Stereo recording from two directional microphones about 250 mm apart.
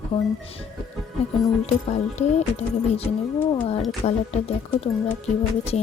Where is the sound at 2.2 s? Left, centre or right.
Left.